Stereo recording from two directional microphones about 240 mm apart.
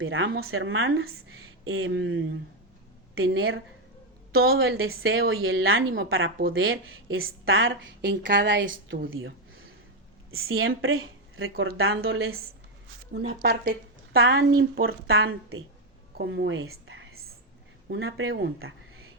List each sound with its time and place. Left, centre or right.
0.0 s a woman's voice: right
10.3 s a woman's voice: right
11.5 s speech: right
11.8 s speech: right
13.1 s a woman's voice: right